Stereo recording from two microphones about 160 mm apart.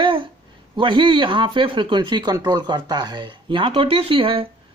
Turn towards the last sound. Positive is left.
turn(degrees=-35)  # may be behind; listen again after turning